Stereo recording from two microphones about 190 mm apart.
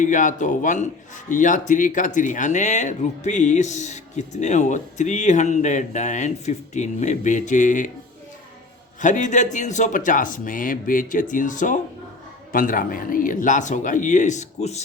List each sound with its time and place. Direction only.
0.0 s speech: 45° left (ahead or behind)
9.0 s a man's voice: 40° left (ahead or behind)